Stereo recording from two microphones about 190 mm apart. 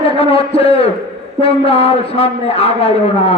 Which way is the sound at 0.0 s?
30° left (ahead or behind).